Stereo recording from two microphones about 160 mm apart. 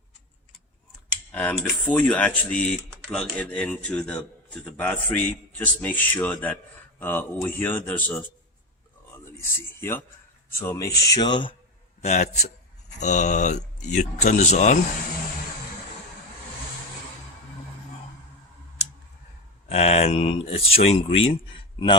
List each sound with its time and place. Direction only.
1.3 s a man's voice: 10° left (ahead or behind)
9.2 s speech: 15° left (ahead or behind)
12.0 s speech: 45° left (ahead or behind)
19.6 s speech: 40° left (ahead or behind)